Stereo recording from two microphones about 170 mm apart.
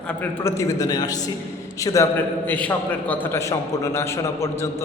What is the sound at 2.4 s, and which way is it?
A man's voice, 10° left (ahead or behind).